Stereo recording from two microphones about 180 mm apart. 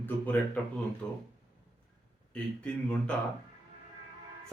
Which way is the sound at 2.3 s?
5° left (ahead or behind).